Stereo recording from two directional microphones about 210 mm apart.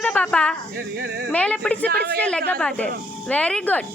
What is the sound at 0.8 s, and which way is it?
Speech, 50° right (ahead or behind).